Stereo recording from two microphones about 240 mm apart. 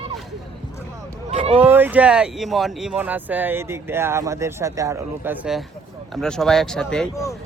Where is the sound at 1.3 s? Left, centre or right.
Right.